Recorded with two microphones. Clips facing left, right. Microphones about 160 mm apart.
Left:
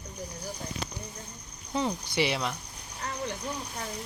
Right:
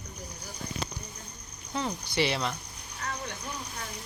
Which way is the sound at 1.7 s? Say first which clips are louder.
Left 3 dB; 15° left (ahead or behind).